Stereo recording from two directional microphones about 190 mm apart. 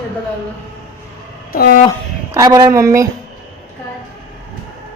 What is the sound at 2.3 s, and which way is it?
Speech, 20° right (ahead or behind).